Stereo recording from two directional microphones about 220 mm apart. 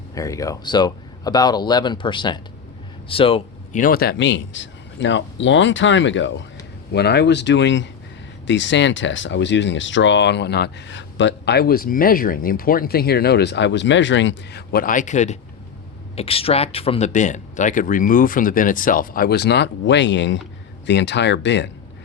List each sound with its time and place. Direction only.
0.1 s a man's voice: 15° left (ahead or behind)
3.8 s speech: 40° left (ahead or behind)